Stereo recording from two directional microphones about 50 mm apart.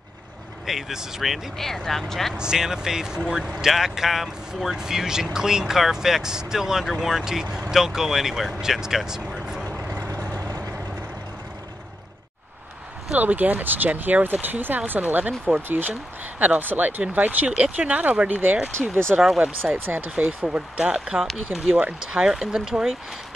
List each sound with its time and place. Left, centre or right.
0.7 s speech: centre
2.3 s speech: centre
13.1 s speech: right
18.8 s speech: centre
19.6 s speech: right
20.4 s speech: right
21.0 s speech: centre
21.6 s speech: right